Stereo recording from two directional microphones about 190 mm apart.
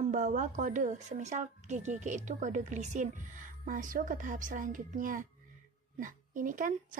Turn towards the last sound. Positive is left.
turn(degrees=-45)  # may be behind; listen again after turning